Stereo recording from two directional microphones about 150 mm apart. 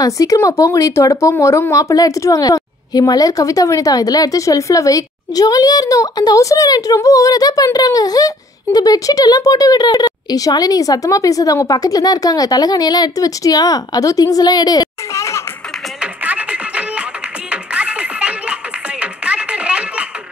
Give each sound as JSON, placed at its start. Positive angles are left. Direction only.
{"t": 0.0, "sound": "speech", "side_deg": 20}
{"t": 16.0, "sound": "music", "side_deg": -10}